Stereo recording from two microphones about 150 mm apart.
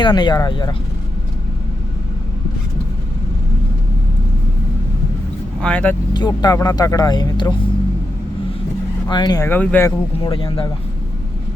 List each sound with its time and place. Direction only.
0.0 s speech: 30° left (ahead or behind)
5.6 s speech: 10° left (ahead or behind)
6.1 s speech: 30° left (ahead or behind)
9.0 s speech: 30° left (ahead or behind)
9.5 s speech: 15° left (ahead or behind)
10.3 s speech: 35° left (ahead or behind)